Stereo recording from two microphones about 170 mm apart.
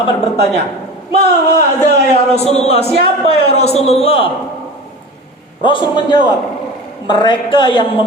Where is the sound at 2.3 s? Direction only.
40° left (ahead or behind).